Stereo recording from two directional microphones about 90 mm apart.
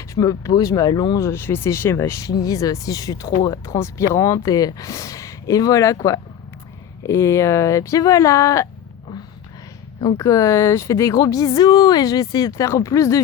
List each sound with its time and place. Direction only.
0.1 s speech: 40° left (ahead or behind)
1.2 s speech: 30° left (ahead or behind)
10.2 s speech: 35° left (ahead or behind)